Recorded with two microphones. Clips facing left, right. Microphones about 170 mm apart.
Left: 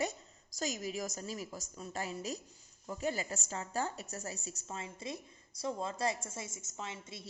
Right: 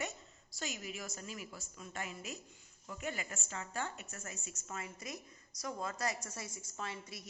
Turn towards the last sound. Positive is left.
turn(degrees=20)  # may be behind; listen again after turning